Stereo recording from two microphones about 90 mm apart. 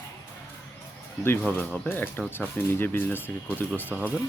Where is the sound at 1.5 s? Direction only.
20° left (ahead or behind).